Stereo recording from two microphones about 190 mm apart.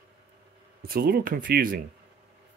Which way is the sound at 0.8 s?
50° right (ahead or behind).